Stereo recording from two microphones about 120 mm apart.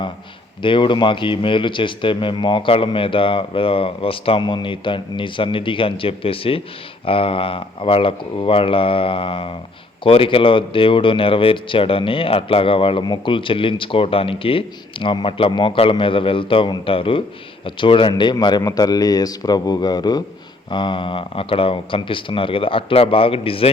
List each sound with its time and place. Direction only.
0.6 s speech: 45° left (ahead or behind)